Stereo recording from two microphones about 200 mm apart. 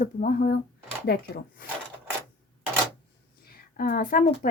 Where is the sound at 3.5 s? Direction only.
45° left (ahead or behind).